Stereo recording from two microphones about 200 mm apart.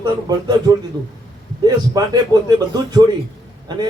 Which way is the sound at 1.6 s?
20° right (ahead or behind).